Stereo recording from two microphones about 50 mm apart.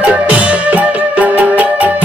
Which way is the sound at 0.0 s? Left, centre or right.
Right.